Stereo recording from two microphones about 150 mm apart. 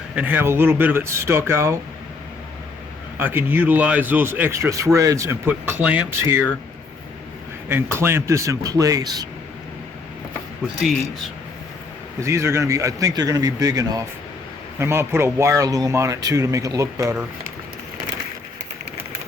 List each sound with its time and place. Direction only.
0.2 s speech: 15° right (ahead or behind)
3.2 s speech: 15° right (ahead or behind)
7.7 s speech: 15° right (ahead or behind)
12.2 s speech: 20° right (ahead or behind)